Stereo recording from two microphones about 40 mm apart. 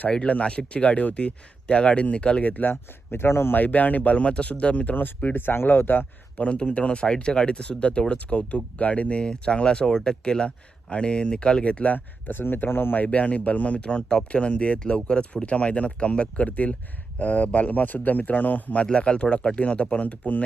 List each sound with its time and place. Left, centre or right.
0.1 s speech: left
2.4 s speech: left
3.1 s speech: left
3.5 s speech: left
4.9 s speech: left
6.3 s speech: left
11.9 s speech: left
13.1 s speech: left
18.9 s speech: left